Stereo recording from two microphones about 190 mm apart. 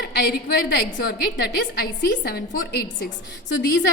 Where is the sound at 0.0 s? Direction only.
60° left (ahead or behind).